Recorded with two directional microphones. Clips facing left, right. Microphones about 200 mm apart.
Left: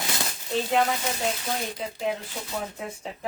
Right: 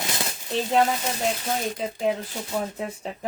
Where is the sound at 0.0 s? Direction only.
20° right (ahead or behind).